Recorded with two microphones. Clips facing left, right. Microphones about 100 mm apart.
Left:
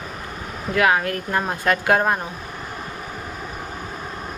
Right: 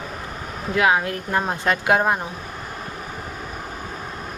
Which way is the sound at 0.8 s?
20° right (ahead or behind).